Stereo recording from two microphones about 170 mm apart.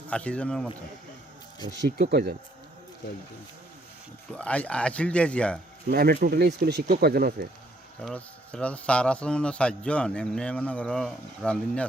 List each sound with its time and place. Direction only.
0.1 s a man's voice: 5° left (ahead or behind)
1.6 s speech: 90° right; by 2.3 s 70° right (ahead or behind)
4.3 s a man's voice: 10° left (ahead or behind)
5.9 s speech: 65° right (ahead or behind)
8.0 s a man's voice: 5° left (ahead or behind)